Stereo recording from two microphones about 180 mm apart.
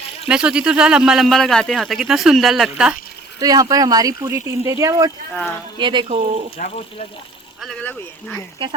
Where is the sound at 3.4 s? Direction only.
20° right (ahead or behind).